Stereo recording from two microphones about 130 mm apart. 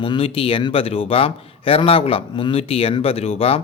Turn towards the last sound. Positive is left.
turn(degrees=50)  # may be behind; listen again after turning